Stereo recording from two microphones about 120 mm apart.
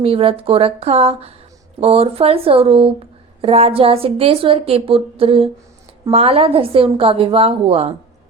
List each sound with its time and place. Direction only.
0.0 s speech: 50° right (ahead or behind)